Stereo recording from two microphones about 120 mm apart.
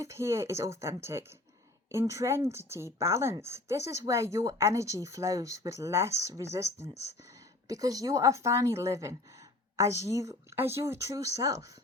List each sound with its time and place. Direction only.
0.0 s speech: 25° right (ahead or behind)